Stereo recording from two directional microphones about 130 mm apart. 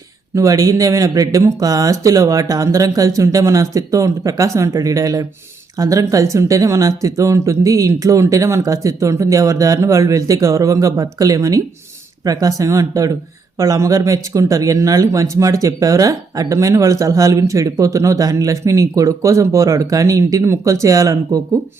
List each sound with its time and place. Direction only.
0.3 s speech: 25° right (ahead or behind)